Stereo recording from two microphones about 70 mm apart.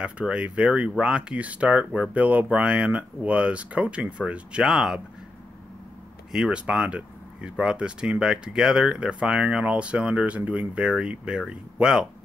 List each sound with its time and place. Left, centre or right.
0.0 s speech: centre
6.3 s speech: centre